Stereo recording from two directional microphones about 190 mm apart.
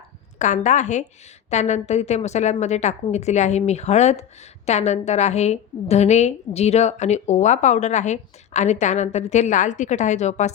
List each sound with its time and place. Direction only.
0.3 s a woman's voice: 40° left (ahead or behind)